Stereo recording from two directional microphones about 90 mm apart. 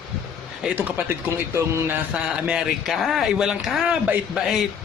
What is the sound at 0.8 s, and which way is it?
Speech, 20° right (ahead or behind).